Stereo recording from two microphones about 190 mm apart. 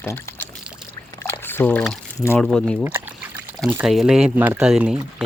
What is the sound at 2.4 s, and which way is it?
Speech, 5° left (ahead or behind).